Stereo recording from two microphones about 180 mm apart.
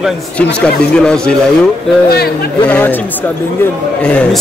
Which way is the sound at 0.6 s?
5° left (ahead or behind).